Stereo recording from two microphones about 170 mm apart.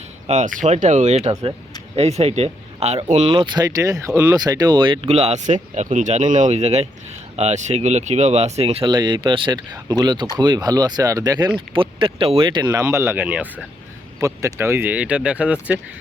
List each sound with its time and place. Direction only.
0.3 s speech: 45° right (ahead or behind)
1.3 s speech: 20° right (ahead or behind)
2.0 s speech: 40° right (ahead or behind); by 4.4 s 10° right (ahead or behind)
4.4 s speech: 25° right (ahead or behind); by 13.7 s 5° right (ahead or behind)
14.2 s speech: 20° right (ahead or behind)